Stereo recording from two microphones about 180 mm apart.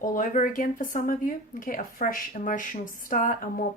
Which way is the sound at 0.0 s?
45° left (ahead or behind).